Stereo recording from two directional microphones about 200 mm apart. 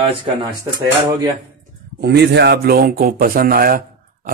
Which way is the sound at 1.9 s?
55° right (ahead or behind).